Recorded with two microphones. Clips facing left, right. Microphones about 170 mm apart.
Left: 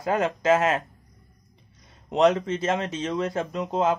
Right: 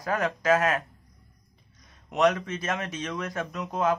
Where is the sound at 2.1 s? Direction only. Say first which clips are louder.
Left 4 dB; 25° left (ahead or behind).